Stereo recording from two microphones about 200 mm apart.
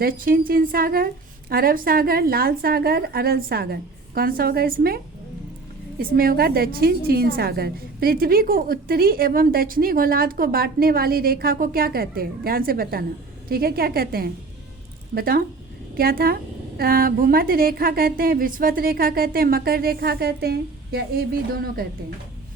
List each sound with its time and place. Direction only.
0.0 s a woman's voice: 45° right (ahead or behind)
6.0 s a woman's voice: 45° right (ahead or behind)